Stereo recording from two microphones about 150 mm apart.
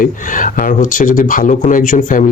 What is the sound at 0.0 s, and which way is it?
Speech, 60° left (ahead or behind).